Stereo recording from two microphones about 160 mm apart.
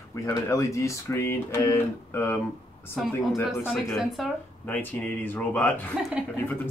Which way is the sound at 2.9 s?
Centre (ahead or behind).